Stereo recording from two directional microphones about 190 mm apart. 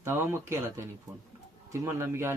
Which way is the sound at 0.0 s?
15° right (ahead or behind).